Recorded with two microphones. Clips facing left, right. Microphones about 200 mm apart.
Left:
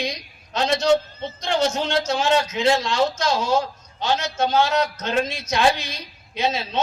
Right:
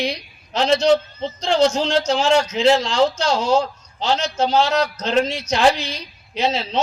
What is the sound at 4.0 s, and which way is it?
A man's voice, 30° right (ahead or behind).